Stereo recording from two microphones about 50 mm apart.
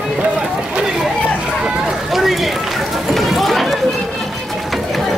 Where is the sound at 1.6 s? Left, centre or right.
Centre.